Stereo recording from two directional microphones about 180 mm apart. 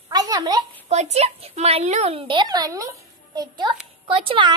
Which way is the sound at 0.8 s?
35° right (ahead or behind).